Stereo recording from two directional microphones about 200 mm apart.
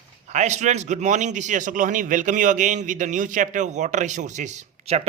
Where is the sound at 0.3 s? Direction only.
35° right (ahead or behind).